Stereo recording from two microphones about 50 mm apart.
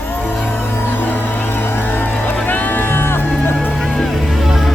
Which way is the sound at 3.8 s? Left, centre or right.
Centre.